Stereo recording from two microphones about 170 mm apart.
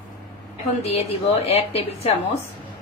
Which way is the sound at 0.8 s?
35° left (ahead or behind).